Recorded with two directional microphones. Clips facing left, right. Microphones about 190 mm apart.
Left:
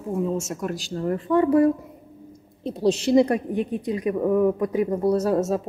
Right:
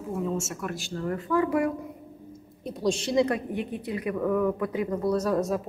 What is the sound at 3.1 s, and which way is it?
A woman's voice, 35° left (ahead or behind).